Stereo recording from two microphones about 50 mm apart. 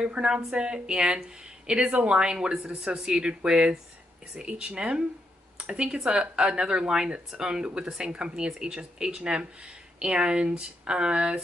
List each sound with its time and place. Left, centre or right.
0.0 s speech: centre